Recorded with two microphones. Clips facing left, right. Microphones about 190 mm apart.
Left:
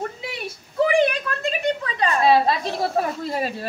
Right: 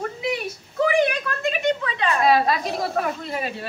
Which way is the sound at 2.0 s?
30° left (ahead or behind).